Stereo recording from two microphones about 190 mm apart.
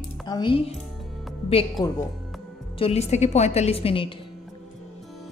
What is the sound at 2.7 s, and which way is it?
A woman's voice, 30° left (ahead or behind).